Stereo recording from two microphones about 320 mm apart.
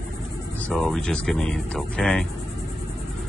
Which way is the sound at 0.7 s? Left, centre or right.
Centre.